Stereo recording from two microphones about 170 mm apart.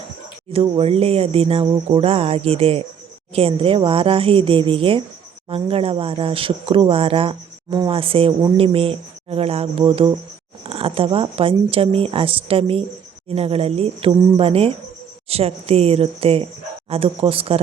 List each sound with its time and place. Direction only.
0.5 s speech: 35° right (ahead or behind)